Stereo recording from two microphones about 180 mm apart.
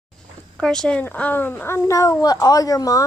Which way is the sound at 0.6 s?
5° left (ahead or behind).